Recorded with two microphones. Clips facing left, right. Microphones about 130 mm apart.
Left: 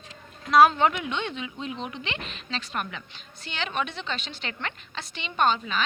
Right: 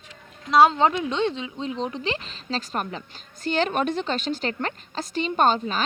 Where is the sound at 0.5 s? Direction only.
25° right (ahead or behind).